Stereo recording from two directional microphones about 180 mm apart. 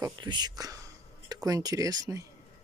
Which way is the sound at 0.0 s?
25° right (ahead or behind).